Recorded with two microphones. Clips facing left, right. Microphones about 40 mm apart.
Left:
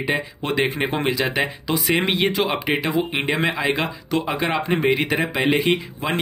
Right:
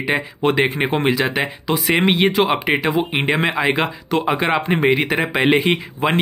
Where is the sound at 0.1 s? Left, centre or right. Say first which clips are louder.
Right 6 dB; centre.